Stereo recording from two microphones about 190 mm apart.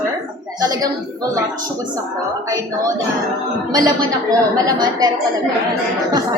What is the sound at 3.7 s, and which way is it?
A woman's voice, 20° right (ahead or behind).